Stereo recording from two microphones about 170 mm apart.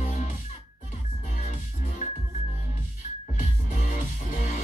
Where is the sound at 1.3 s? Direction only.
45° left (ahead or behind).